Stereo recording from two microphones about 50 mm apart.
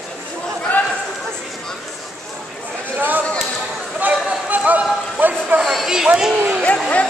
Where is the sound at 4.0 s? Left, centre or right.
Right.